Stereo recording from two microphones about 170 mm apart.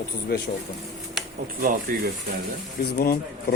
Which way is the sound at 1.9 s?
55° right (ahead or behind).